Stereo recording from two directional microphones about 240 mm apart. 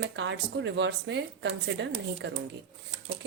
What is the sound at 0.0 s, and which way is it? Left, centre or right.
Speech, right.